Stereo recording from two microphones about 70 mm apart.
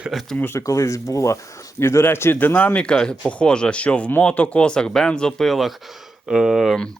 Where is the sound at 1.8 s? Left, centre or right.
Left.